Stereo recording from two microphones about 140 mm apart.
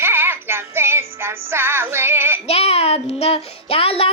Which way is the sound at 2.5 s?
50° left (ahead or behind).